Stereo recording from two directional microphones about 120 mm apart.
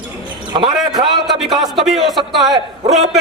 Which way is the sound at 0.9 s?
35° right (ahead or behind).